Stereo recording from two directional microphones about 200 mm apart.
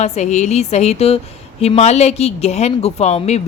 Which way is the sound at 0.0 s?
35° left (ahead or behind).